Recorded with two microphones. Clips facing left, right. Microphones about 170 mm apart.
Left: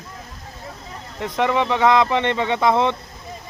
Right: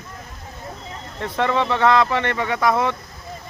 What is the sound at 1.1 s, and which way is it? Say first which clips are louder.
Speech: left 1 dB; 10° left (ahead or behind).